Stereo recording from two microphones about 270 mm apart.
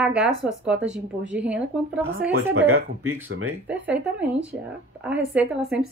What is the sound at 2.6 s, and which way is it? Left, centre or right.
Speech, right.